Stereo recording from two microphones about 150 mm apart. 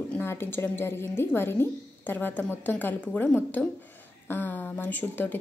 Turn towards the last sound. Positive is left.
turn(degrees=15)  # may be behind; listen again after turning